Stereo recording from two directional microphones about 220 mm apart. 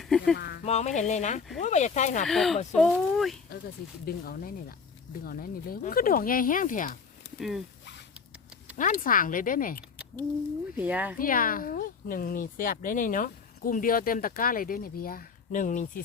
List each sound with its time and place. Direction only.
0.0 s music: centre (ahead or behind)
0.3 s speech: 45° left (ahead or behind)
0.6 s speech: 30° left (ahead or behind)
2.2 s speech: centre (ahead or behind)
4.0 s speech: 45° left (ahead or behind)
7.3 s speech: centre (ahead or behind)
8.7 s speech: 35° left (ahead or behind)
10.8 s speech: 5° right (ahead or behind)
11.2 s speech: 40° left (ahead or behind)